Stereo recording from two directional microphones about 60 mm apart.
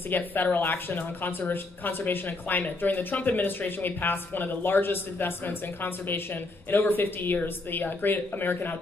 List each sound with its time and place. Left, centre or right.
0.1 s speech: left